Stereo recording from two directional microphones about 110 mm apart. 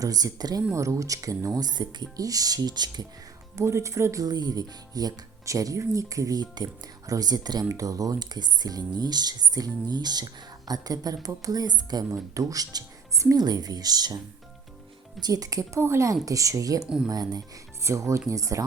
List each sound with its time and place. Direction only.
0.0 s speech: 35° right (ahead or behind)
3.5 s speech: 25° right (ahead or behind)
15.2 s speech: 35° right (ahead or behind)
17.8 s speech: 25° right (ahead or behind)